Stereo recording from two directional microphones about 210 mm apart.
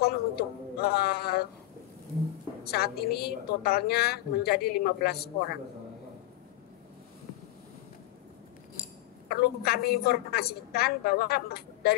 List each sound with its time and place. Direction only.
0.0 s a sound: 50° left (ahead or behind)
2.6 s a woman's voice: 50° left (ahead or behind)
9.3 s a woman's voice: 50° left (ahead or behind)